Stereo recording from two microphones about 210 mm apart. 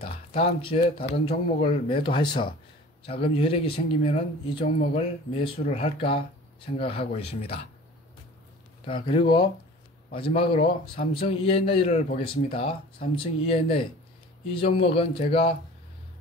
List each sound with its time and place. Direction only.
0.0 s speech: 25° left (ahead or behind)
8.8 s speech: 25° left (ahead or behind)